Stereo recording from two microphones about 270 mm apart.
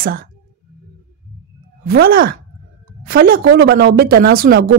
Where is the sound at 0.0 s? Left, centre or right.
Right.